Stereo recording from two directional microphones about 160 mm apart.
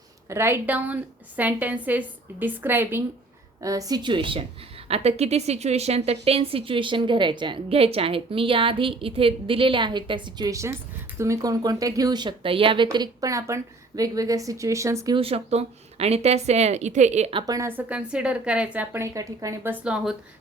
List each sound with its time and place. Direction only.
0.3 s a woman's voice: 15° right (ahead or behind)
15.1 s a woman's voice: 35° right (ahead or behind)
17.4 s a woman's voice: 20° right (ahead or behind)
19.8 s a woman's voice: 5° right (ahead or behind)